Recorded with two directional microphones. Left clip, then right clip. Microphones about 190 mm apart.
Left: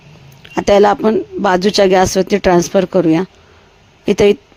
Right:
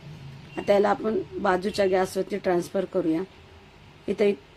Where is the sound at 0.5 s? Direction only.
50° left (ahead or behind).